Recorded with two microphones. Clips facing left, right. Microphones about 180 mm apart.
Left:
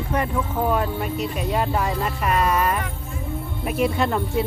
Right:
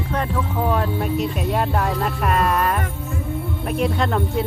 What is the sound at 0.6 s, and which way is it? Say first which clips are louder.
Speech: right 1 dB; centre (ahead or behind).